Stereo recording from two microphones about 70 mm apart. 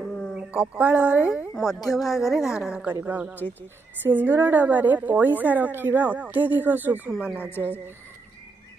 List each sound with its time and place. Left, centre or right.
0.0 s a sound: centre
0.3 s speech: centre
1.9 s a woman's voice: centre
3.0 s a woman's voice: right
7.1 s a woman's voice: centre